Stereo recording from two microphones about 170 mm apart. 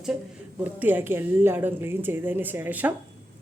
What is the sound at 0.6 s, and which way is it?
Speech, 10° right (ahead or behind).